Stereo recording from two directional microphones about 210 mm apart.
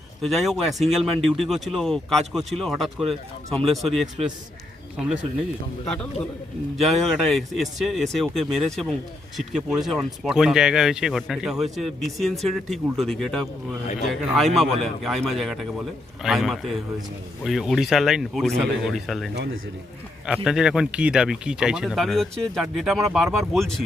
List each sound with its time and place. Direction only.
0.2 s speech: centre (ahead or behind)
6.7 s speech: centre (ahead or behind)